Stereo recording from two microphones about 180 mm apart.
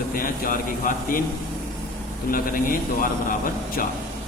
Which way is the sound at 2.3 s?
50° left (ahead or behind).